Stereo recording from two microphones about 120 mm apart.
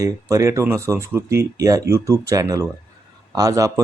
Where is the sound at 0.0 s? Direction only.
25° right (ahead or behind).